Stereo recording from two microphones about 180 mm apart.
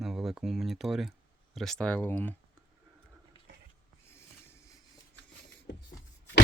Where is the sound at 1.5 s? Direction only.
Centre (ahead or behind).